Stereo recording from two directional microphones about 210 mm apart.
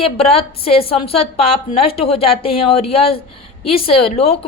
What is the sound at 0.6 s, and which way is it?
A woman's voice, 25° left (ahead or behind).